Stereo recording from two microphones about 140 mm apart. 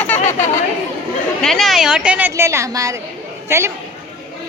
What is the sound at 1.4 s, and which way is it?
A woman's voice, centre (ahead or behind).